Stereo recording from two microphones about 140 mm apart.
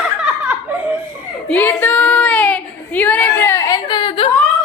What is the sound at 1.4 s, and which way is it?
Child singing, 10° left (ahead or behind).